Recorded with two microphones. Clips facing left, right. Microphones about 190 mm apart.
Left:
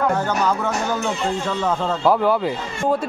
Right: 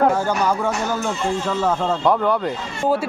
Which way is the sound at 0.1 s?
10° right (ahead or behind).